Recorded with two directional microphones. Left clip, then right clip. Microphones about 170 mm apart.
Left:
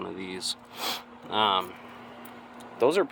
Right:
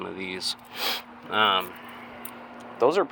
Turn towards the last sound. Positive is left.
turn(degrees=20)  # may be behind; listen again after turning